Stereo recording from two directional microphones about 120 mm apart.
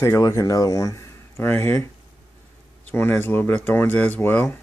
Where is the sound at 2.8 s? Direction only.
20° left (ahead or behind).